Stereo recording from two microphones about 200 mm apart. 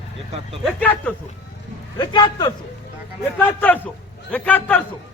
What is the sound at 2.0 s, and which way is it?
Speech, 20° left (ahead or behind).